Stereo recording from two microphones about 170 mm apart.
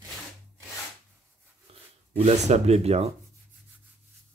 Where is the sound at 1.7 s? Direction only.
35° right (ahead or behind).